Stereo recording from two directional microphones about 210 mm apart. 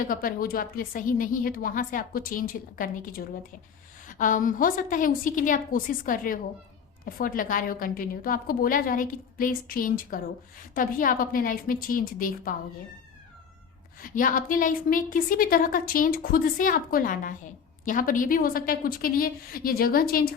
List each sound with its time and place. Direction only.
0.1 s a woman's voice: 40° left (ahead or behind)
14.0 s a woman's voice: 40° left (ahead or behind)